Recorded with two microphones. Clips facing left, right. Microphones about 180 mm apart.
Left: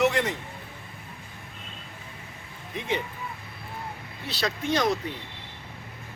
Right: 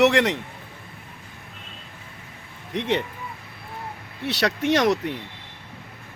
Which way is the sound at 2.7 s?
70° right (ahead or behind).